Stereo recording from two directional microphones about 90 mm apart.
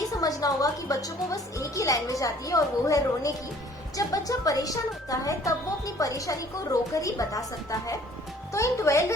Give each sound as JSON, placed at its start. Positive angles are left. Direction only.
{"t": 0.1, "sound": "a woman's voice", "side_deg": 40}